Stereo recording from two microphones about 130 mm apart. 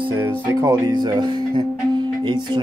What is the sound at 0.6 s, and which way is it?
Speech, 35° right (ahead or behind).